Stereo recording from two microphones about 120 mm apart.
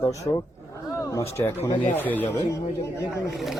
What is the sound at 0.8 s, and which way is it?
Wild animals, 25° left (ahead or behind).